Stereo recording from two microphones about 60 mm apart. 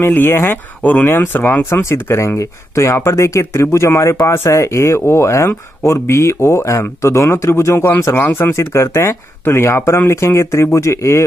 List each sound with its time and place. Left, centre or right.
0.0 s speech: left
8.1 s speech: left